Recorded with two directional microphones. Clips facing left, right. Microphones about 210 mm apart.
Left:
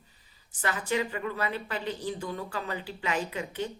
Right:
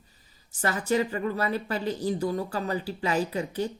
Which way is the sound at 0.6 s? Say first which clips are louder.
Right 4 dB; 40° right (ahead or behind).